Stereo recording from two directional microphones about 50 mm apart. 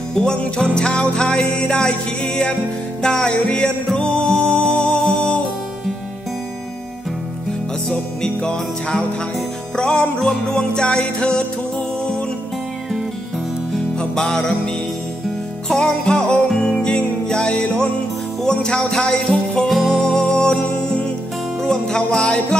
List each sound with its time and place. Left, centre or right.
0.1 s music: centre
7.9 s music: centre
13.9 s music: centre
15.7 s music: centre
19.7 s music: centre
21.5 s music: centre